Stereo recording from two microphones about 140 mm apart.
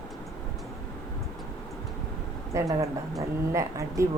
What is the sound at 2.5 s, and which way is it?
A woman's voice, 20° right (ahead or behind).